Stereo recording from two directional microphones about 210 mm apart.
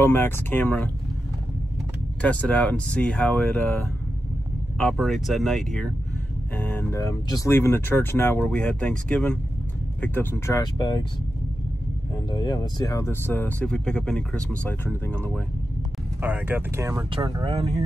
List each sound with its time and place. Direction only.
0.0 s speech: 10° left (ahead or behind)
2.2 s speech: 5° left (ahead or behind)
12.3 s speech: 20° left (ahead or behind)
16.2 s speech: 10° right (ahead or behind); by 17.8 s 30° right (ahead or behind)